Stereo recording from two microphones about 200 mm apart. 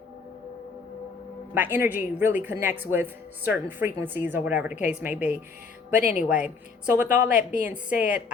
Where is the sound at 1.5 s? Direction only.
10° right (ahead or behind).